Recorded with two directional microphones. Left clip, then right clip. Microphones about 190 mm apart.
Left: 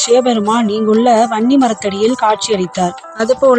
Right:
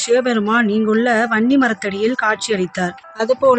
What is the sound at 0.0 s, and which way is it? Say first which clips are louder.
Speech: left 5 dB; 20° left (ahead or behind).